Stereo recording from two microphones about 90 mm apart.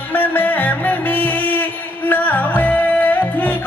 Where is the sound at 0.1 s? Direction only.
20° left (ahead or behind).